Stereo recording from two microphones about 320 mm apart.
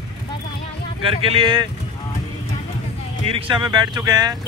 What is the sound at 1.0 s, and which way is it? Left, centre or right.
Speech, centre.